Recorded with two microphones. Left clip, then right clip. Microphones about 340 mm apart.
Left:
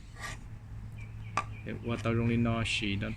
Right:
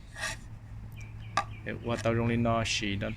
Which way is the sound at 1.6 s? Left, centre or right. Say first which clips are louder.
Right 4 dB; centre.